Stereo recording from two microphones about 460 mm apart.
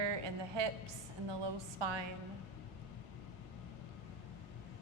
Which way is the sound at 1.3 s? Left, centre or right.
Right.